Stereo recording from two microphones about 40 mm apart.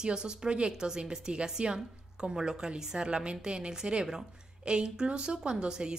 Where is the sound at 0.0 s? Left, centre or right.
Right.